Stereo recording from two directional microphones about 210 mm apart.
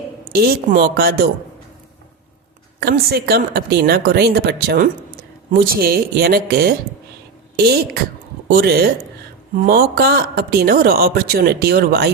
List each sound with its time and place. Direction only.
0.3 s a man's voice: 45° right (ahead or behind)
2.8 s a man's voice: 50° right (ahead or behind)